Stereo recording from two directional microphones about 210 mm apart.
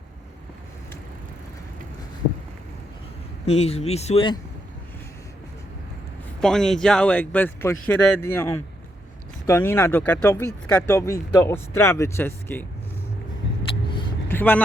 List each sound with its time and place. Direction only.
3.4 s speech: 30° left (ahead or behind)
6.4 s speech: centre (ahead or behind)
14.3 s speech: 10° left (ahead or behind)